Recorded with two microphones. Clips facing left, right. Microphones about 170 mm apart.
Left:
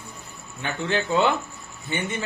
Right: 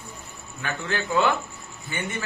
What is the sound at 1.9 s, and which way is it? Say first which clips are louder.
Speech: left 4 dB; 25° left (ahead or behind).